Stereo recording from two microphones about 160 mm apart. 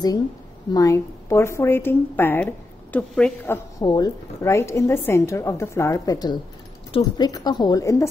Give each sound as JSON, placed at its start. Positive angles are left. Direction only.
{"t": 0.7, "sound": "a woman's voice", "side_deg": 20}
{"t": 3.8, "sound": "a woman's voice", "side_deg": 25}